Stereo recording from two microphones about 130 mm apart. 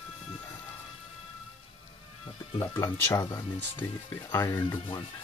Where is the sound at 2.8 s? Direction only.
25° left (ahead or behind).